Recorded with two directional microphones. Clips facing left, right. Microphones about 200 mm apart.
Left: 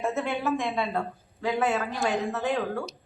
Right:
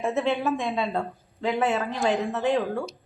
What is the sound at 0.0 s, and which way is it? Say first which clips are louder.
A woman's voice: right 3 dB; 20° right (ahead or behind).